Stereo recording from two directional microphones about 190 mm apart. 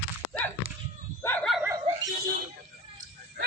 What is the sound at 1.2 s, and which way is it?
Dog, 5° left (ahead or behind).